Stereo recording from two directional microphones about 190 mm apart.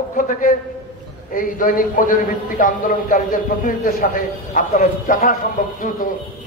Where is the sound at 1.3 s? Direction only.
45° left (ahead or behind).